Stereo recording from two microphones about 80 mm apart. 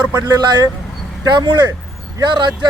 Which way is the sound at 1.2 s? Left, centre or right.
Right.